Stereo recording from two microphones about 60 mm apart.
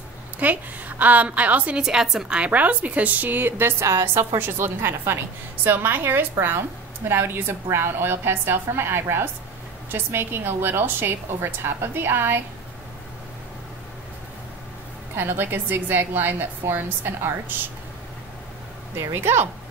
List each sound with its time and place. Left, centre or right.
0.4 s a woman's voice: right
1.8 s a woman's voice: centre; by 12.4 s right
15.1 s a woman's voice: right
18.9 s a woman's voice: right